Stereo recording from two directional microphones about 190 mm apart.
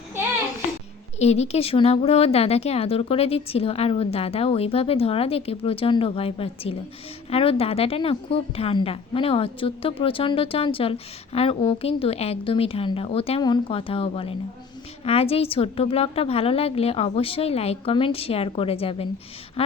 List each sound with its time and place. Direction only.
1.2 s a woman's voice: 35° left (ahead or behind)